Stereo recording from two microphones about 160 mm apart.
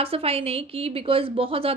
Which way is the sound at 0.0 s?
35° right (ahead or behind).